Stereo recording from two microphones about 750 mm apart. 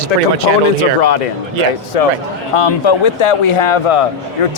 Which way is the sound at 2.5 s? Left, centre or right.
Left.